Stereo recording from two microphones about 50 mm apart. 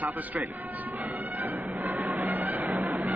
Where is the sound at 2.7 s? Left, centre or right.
Right.